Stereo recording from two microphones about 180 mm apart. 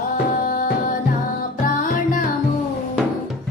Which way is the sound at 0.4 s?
50° left (ahead or behind).